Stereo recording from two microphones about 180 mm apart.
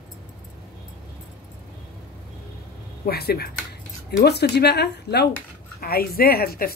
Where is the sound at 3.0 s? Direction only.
60° left (ahead or behind).